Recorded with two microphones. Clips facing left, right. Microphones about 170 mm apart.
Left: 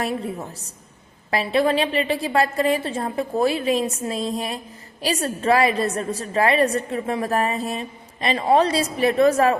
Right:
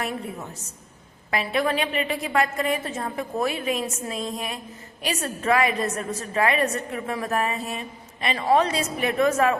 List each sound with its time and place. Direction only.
1.3 s a woman's voice: 35° left (ahead or behind)